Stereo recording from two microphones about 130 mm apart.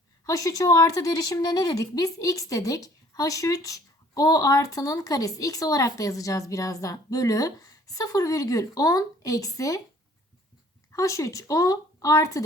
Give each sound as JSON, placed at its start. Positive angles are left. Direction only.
{"t": 0.3, "sound": "speech", "side_deg": 25}
{"t": 10.9, "sound": "speech", "side_deg": 25}